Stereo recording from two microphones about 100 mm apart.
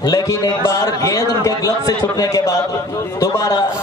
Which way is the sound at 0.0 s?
35° left (ahead or behind).